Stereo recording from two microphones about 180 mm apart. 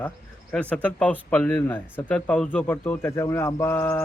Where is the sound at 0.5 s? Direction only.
10° left (ahead or behind).